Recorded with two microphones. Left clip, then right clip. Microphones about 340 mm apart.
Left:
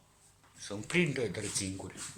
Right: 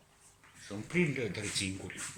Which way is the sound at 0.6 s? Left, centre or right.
Left.